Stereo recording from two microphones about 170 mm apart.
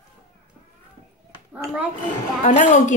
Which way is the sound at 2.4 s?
45° left (ahead or behind).